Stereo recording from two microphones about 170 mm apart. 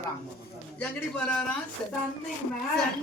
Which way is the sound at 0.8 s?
10° left (ahead or behind).